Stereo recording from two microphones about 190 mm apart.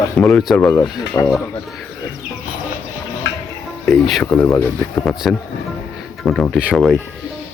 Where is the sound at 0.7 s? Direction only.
15° left (ahead or behind).